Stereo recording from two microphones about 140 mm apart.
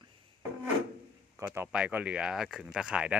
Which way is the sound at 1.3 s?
15° right (ahead or behind).